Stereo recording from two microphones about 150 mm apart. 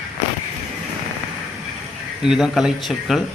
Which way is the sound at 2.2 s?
5° right (ahead or behind).